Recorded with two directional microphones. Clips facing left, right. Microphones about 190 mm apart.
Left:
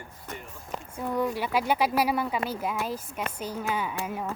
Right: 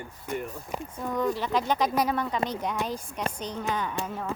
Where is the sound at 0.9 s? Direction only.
10° left (ahead or behind).